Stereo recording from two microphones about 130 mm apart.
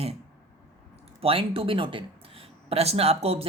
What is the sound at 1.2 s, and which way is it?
A woman's voice, 45° right (ahead or behind).